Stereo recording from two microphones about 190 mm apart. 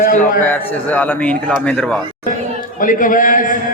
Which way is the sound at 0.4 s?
10° left (ahead or behind).